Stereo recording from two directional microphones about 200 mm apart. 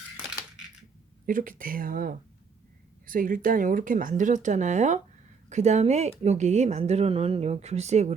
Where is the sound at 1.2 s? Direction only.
45° right (ahead or behind).